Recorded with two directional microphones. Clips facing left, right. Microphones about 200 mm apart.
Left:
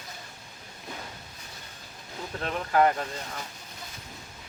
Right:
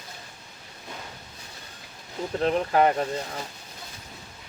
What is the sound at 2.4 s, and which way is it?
Speech, 25° right (ahead or behind).